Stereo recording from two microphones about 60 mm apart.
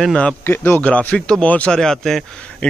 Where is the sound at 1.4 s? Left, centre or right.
Left.